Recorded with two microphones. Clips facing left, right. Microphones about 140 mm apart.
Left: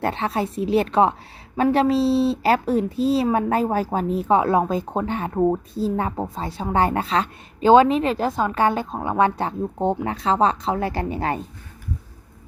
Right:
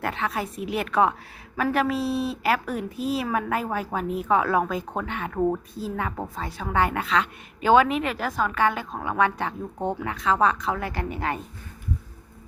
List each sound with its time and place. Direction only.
0.0 s a woman's voice: 30° left (ahead or behind)